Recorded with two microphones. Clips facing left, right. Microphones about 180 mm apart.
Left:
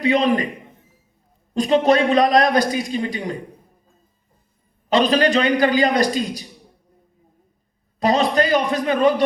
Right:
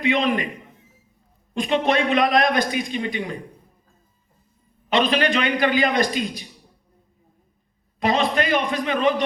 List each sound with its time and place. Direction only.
0.0 s a man's voice: 40° left (ahead or behind)
1.5 s a man's voice: 40° left (ahead or behind)
4.9 s a man's voice: 40° left (ahead or behind)
7.9 s a man's voice: 40° left (ahead or behind)